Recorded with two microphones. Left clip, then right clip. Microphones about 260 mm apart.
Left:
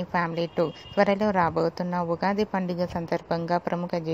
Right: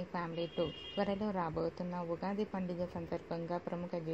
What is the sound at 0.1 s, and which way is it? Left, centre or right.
A woman's voice, left.